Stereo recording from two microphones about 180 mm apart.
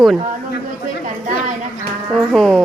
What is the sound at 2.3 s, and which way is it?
Speech, 5° left (ahead or behind).